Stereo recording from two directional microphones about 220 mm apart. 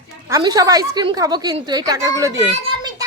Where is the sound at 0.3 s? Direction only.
15° right (ahead or behind).